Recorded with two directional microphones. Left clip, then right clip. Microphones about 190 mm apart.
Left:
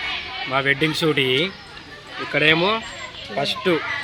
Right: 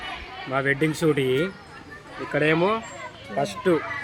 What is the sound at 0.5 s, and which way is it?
Speech, 10° right (ahead or behind).